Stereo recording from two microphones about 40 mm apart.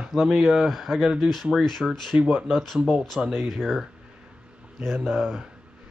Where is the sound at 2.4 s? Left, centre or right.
Centre.